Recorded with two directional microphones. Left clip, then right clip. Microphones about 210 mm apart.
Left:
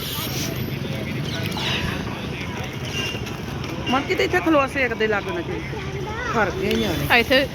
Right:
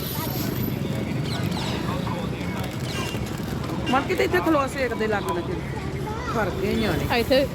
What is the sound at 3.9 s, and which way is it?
Speech, 45° left (ahead or behind).